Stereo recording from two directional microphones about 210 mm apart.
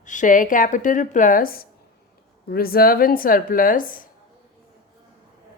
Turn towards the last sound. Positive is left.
turn(degrees=40)  # may be behind; listen again after turning